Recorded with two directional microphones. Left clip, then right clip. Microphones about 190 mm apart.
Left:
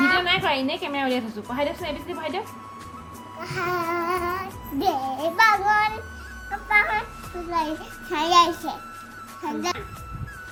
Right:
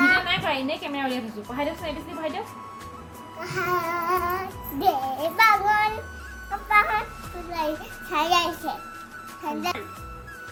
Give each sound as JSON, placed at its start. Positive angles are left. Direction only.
{"t": 0.3, "sound": "a woman's voice", "side_deg": 45}
{"t": 3.4, "sound": "music", "side_deg": 0}